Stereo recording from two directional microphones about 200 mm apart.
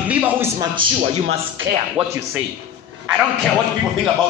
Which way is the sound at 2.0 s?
5° right (ahead or behind).